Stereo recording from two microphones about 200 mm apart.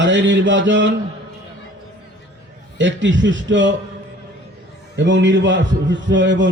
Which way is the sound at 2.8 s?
65° right (ahead or behind).